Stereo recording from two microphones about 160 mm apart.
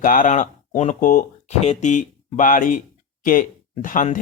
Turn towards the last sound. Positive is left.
turn(degrees=55)  # may be behind; listen again after turning